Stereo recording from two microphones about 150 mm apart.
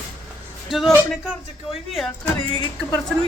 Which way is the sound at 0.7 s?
Centre (ahead or behind).